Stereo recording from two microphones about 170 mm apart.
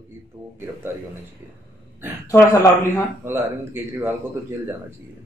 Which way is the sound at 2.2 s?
20° left (ahead or behind).